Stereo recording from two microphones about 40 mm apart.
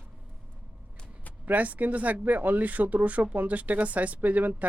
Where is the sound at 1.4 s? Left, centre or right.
Right.